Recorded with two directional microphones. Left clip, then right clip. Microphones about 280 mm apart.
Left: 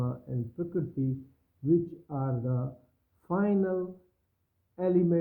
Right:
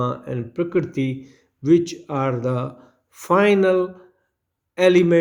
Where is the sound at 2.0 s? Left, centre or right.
Right.